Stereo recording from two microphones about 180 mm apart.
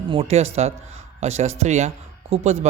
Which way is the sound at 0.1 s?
35° right (ahead or behind).